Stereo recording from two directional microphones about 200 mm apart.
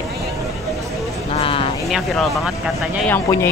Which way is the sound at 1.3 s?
25° left (ahead or behind).